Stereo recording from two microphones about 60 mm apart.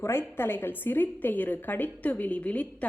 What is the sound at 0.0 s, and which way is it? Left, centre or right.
A woman's voice, left.